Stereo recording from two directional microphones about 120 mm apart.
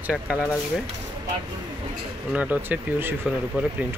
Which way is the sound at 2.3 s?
10° right (ahead or behind).